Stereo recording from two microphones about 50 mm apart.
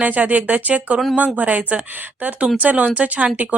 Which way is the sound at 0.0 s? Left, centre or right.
Right.